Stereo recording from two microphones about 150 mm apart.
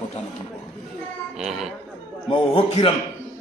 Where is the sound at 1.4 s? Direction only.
5° right (ahead or behind).